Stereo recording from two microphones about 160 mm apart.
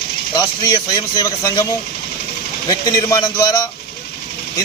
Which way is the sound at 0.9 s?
25° left (ahead or behind).